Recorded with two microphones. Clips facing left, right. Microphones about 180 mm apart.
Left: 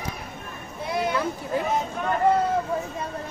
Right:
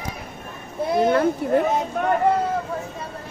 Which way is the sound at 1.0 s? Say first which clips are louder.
Right 8 dB; 55° right (ahead or behind).